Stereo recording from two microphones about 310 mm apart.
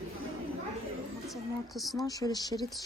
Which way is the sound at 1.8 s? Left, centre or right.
Centre.